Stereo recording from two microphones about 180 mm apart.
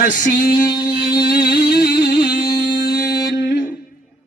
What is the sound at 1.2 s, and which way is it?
Music, 60° left (ahead or behind).